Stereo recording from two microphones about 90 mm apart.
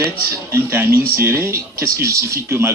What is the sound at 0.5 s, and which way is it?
Speech, 30° right (ahead or behind).